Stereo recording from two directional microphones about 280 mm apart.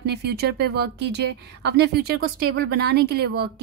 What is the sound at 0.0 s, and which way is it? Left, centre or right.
Speech, right.